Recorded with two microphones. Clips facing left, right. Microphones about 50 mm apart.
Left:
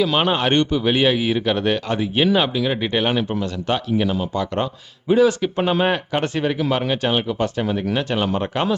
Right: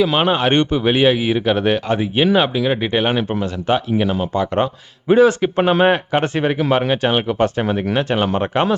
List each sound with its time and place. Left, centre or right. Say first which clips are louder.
0.0 s a man's voice: right 3 dB; centre
0.5 s a man's voice: right 2 dB; right
3.2 s speech: right 2 dB; right
3.7 s a man's voice: right 3 dB; centre
4.6 s speech: right 4 dB; right
7.3 s speech: right 4 dB; right
7.9 s speech: right 5 dB; right